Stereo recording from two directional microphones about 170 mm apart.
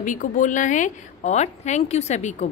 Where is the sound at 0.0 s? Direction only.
50° left (ahead or behind).